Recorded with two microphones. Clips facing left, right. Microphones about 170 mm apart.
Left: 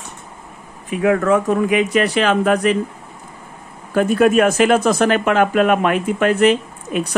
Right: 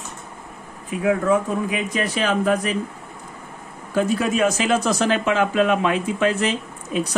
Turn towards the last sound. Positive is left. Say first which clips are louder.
# left 2 dB
turn(degrees=60)  # may be behind; listen again after turning